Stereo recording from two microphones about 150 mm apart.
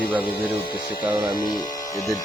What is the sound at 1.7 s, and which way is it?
Tools, 25° left (ahead or behind).